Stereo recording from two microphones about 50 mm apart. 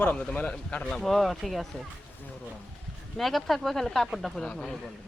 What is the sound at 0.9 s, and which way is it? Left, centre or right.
Speech, centre.